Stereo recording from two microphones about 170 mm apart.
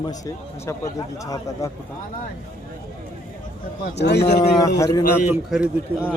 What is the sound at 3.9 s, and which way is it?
Speech, 85° left.